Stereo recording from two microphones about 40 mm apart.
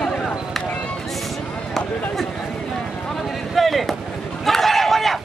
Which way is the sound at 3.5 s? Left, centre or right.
Centre.